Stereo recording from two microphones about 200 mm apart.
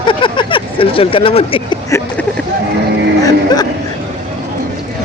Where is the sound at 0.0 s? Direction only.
25° left (ahead or behind).